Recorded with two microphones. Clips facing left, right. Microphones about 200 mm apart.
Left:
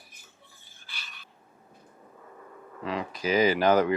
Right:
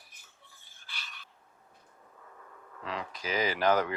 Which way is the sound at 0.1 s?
5° left (ahead or behind).